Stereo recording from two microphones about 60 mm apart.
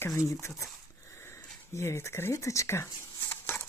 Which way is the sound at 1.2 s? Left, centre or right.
Left.